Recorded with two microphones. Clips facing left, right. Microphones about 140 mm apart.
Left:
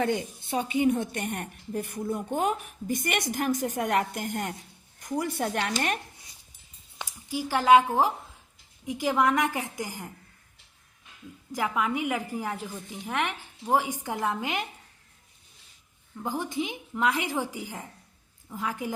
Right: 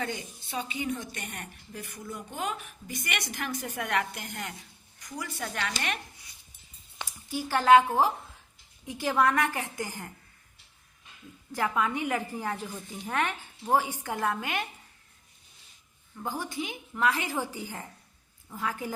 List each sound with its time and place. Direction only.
0.0 s a woman's voice: 55° left (ahead or behind)
7.0 s a woman's voice: 15° left (ahead or behind)
11.5 s a woman's voice: 10° left (ahead or behind)
16.1 s a woman's voice: 15° left (ahead or behind)